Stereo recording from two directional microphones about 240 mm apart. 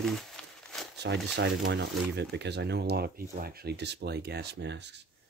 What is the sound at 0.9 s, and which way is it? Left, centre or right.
Speech, right.